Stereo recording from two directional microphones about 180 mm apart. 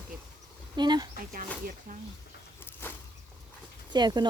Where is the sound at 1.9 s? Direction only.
50° right (ahead or behind).